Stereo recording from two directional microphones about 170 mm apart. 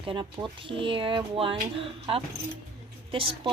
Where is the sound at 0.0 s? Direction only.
30° right (ahead or behind).